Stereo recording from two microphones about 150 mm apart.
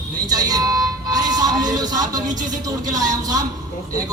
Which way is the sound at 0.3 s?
25° right (ahead or behind).